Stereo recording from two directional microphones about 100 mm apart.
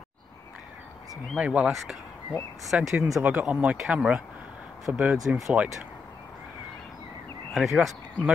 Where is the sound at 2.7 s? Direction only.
10° right (ahead or behind).